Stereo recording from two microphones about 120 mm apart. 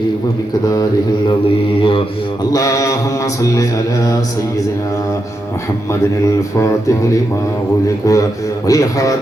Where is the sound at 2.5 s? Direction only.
30° left (ahead or behind).